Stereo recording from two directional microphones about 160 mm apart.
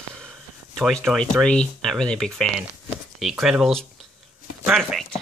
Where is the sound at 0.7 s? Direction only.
5° left (ahead or behind).